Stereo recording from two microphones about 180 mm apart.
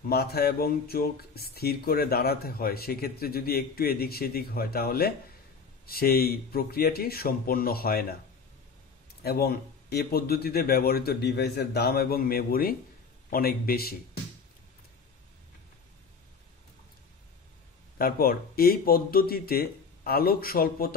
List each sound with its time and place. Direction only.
0.0 s speech: 60° left (ahead or behind)
9.2 s speech: 60° left (ahead or behind)
17.9 s speech: 55° left (ahead or behind)